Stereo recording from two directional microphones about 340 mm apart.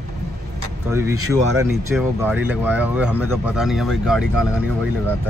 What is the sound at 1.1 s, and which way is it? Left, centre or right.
Speech, right.